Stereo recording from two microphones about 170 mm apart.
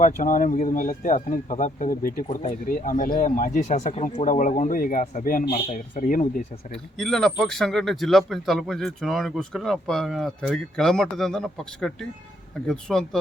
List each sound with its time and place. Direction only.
0.0 s speech: 50° left (ahead or behind)
7.0 s speech: 5° left (ahead or behind)